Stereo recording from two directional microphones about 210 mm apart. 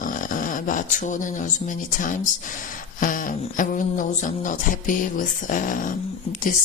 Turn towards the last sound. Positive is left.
turn(degrees=40)  # may be behind; listen again after turning